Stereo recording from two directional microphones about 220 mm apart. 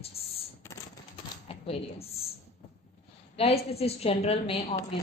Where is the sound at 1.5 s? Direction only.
25° left (ahead or behind).